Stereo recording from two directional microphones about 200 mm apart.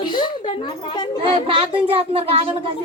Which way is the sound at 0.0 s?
20° left (ahead or behind).